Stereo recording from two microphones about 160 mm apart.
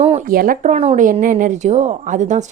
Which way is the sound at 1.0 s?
60° right (ahead or behind).